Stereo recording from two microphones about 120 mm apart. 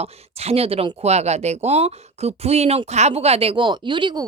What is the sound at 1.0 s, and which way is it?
A woman's voice, 65° right (ahead or behind).